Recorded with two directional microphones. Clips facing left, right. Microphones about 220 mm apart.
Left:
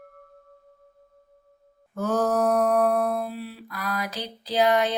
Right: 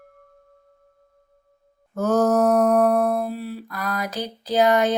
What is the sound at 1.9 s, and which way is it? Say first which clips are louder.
Mantra: right 5 dB; 45° right (ahead or behind).